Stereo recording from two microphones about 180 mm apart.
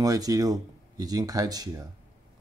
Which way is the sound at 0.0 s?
20° right (ahead or behind).